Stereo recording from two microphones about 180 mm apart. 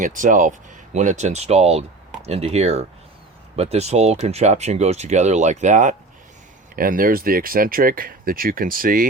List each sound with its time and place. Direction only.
0.0 s speech: 45° right (ahead or behind)